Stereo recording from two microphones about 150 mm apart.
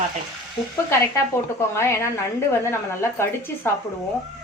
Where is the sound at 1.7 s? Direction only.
15° left (ahead or behind).